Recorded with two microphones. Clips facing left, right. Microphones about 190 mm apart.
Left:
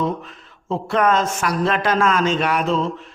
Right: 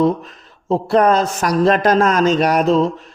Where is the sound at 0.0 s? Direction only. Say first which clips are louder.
Right 7 dB; 35° right (ahead or behind).